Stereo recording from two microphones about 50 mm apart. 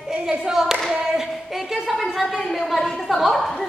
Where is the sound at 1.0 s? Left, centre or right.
Centre.